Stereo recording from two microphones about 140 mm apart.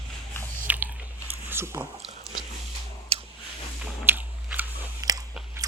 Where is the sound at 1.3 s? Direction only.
15° right (ahead or behind).